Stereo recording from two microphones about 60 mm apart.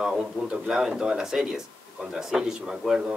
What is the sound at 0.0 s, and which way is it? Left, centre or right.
A man's voice, centre.